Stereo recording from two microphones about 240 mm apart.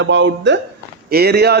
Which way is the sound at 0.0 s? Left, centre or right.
Right.